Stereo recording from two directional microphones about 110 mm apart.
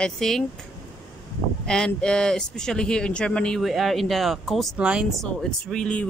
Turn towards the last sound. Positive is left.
turn(degrees=10)  # may be behind; listen again after turning